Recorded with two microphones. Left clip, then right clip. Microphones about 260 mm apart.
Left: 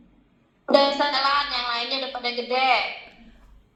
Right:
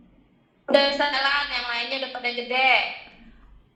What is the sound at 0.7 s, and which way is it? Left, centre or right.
Music, centre.